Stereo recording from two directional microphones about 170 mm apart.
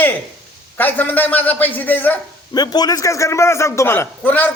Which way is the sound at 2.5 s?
25° left (ahead or behind).